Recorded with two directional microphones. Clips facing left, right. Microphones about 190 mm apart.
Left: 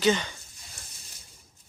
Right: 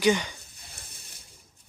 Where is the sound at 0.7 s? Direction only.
60° right (ahead or behind).